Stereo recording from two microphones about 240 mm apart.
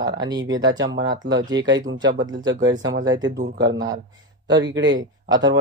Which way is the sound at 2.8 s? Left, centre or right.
Right.